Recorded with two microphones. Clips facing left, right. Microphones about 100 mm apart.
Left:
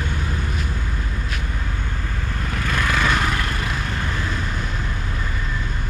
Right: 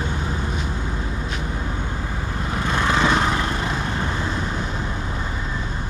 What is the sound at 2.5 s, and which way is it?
Vehicle, 20° right (ahead or behind).